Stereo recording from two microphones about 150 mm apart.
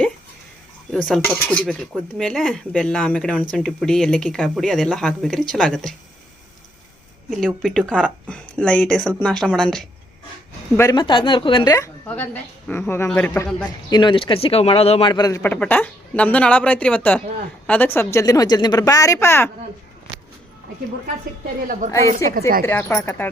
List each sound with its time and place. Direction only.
0.9 s speech: 5° left (ahead or behind)
7.3 s speech: 5° left (ahead or behind)
10.8 s a man's voice: 30° left (ahead or behind)
12.0 s speech: 10° left (ahead or behind)
13.9 s a man's voice: 30° left (ahead or behind)
15.4 s speech: 10° left (ahead or behind)
21.9 s speech: 20° left (ahead or behind)
22.4 s a woman's voice: 75° right (ahead or behind)
22.6 s speech: 15° left (ahead or behind)